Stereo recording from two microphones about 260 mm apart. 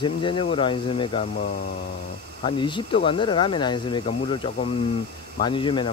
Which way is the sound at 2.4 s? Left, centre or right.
Centre.